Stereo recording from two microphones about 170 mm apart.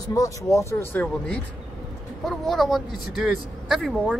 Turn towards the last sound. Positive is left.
turn(degrees=0)  # may be behind; listen again after turning